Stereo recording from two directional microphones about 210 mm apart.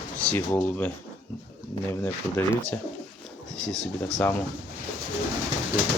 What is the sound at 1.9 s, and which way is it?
Speech, 10° left (ahead or behind).